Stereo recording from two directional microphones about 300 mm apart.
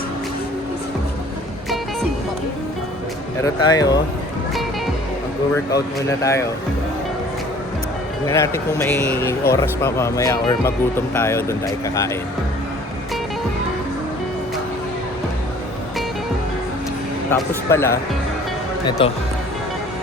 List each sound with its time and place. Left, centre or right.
3.4 s speech: centre
5.5 s speech: centre
8.3 s speech: centre
17.3 s speech: centre